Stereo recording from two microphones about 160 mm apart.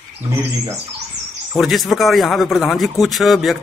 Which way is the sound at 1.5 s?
Centre (ahead or behind).